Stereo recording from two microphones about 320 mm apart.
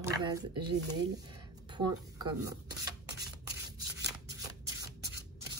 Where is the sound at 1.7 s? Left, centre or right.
Centre.